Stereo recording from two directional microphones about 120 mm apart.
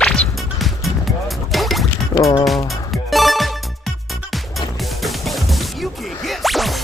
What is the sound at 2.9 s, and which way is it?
Music, centre (ahead or behind).